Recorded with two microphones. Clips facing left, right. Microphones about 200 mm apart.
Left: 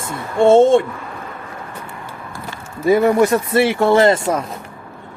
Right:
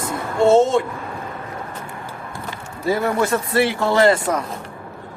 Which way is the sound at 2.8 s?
20° left (ahead or behind).